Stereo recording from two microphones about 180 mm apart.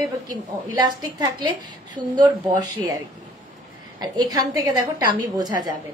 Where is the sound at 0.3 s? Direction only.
20° right (ahead or behind).